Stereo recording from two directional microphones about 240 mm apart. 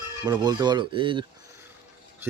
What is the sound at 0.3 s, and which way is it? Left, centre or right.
Speech, centre.